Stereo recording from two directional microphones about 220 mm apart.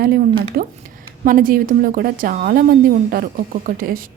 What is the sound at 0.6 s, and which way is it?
A woman's voice, 45° right (ahead or behind).